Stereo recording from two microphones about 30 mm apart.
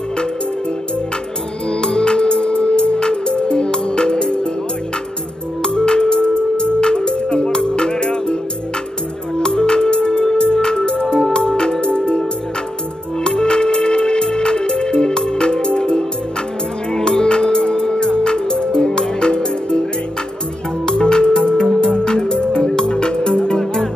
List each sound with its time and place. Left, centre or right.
1.7 s music: left
5.6 s music: left
9.4 s music: left
13.2 s music: left
20.8 s music: left
23.6 s music: centre